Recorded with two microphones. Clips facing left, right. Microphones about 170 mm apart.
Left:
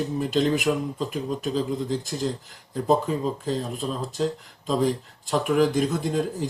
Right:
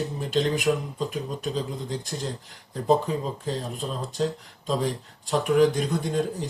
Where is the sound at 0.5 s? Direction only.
Centre (ahead or behind).